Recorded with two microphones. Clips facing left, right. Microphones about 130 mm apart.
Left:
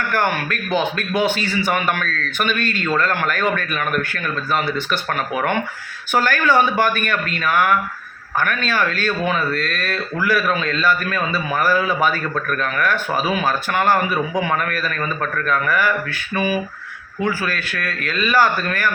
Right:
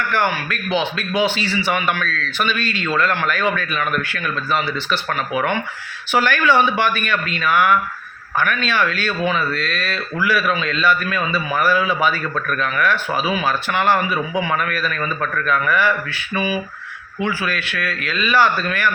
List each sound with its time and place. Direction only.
0.1 s speech: 45° left (ahead or behind)